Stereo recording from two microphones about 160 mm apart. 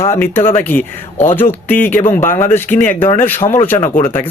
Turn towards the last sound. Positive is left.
turn(degrees=10)  # may be behind; listen again after turning